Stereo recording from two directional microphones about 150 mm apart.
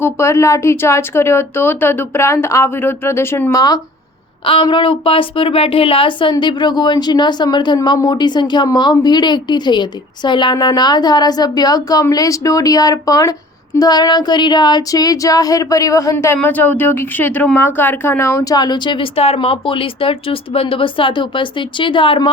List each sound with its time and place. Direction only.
0.0 s speech: 15° left (ahead or behind)
4.4 s a woman's voice: 35° left (ahead or behind)